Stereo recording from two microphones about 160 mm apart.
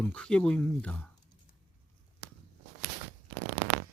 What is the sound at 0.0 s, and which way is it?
Speech, 5° left (ahead or behind).